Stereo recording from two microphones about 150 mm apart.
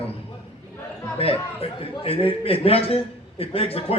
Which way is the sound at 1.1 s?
40° left (ahead or behind).